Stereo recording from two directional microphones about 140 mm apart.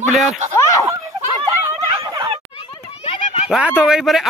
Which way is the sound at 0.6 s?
20° left (ahead or behind).